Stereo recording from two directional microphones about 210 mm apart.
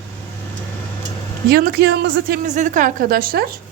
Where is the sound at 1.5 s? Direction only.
50° right (ahead or behind).